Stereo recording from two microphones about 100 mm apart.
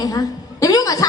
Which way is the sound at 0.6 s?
35° left (ahead or behind).